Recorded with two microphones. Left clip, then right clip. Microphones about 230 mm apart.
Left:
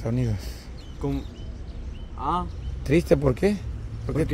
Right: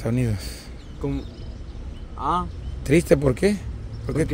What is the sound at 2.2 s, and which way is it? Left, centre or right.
Speech, centre.